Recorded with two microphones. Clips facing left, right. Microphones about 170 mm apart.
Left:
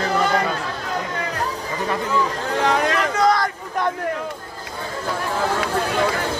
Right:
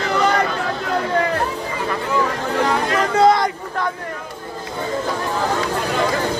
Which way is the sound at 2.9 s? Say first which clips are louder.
Right 4 dB; 30° right (ahead or behind).